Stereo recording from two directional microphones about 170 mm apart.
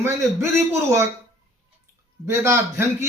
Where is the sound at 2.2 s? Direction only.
15° right (ahead or behind).